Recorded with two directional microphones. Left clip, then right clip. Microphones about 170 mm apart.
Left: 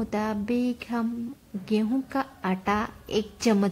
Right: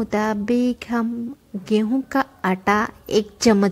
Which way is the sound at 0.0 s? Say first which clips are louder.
Right 7 dB; 25° right (ahead or behind).